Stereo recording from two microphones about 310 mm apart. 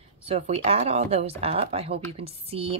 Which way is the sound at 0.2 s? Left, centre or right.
Centre.